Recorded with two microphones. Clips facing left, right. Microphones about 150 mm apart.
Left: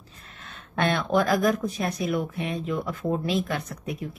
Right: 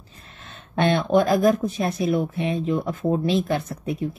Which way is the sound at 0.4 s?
25° right (ahead or behind).